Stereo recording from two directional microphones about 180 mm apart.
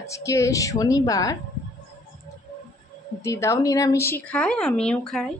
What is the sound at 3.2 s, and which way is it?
Speech, 15° left (ahead or behind).